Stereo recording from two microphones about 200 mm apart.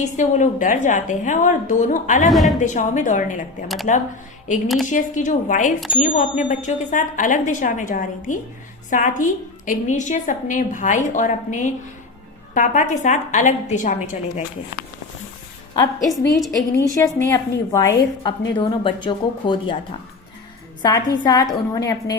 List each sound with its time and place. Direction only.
0.2 s speech: 40° left (ahead or behind)
2.3 s a woman's voice: centre (ahead or behind)
2.6 s speech: 40° left (ahead or behind)
16.3 s a woman's voice: centre (ahead or behind)
16.9 s a woman's voice: 15° left (ahead or behind)
20.8 s a woman's voice: 20° left (ahead or behind)